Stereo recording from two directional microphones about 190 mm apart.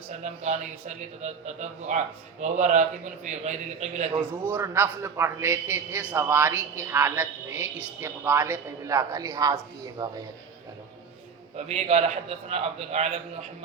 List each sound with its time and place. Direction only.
0.1 s a man's voice: 35° right (ahead or behind)
4.2 s a man's voice: 10° right (ahead or behind)
11.5 s a man's voice: 35° right (ahead or behind)